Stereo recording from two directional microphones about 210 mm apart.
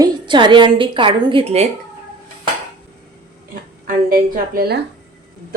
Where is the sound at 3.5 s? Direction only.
40° right (ahead or behind).